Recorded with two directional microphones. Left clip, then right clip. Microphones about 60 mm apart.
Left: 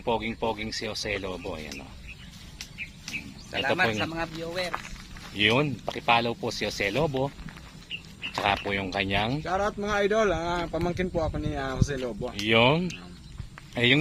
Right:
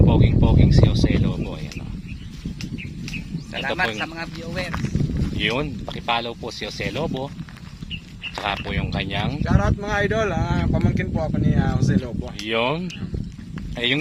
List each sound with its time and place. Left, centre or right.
0.0 s speech: centre
0.9 s speech: left
3.1 s bird: left
4.0 s speech: centre
5.9 s speech: left
8.4 s speech: left
12.2 s speech: centre
13.7 s speech: centre